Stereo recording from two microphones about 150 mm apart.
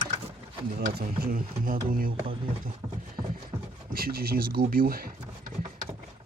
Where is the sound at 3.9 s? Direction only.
85° right.